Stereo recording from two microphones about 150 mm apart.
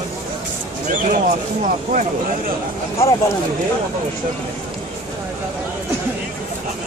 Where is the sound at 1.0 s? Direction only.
55° right (ahead or behind).